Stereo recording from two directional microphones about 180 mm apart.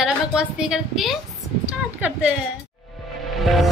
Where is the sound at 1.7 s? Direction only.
10° right (ahead or behind).